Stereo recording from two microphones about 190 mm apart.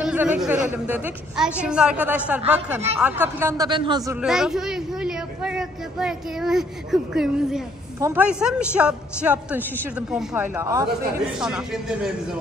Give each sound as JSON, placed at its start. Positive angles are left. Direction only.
{"t": 0.0, "sound": "a woman's voice", "side_deg": -5}
{"t": 4.2, "sound": "a woman's voice", "side_deg": 0}
{"t": 11.3, "sound": "speech", "side_deg": -5}